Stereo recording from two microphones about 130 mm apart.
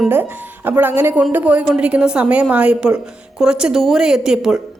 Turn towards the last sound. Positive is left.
turn(degrees=-5)  # may be behind; listen again after turning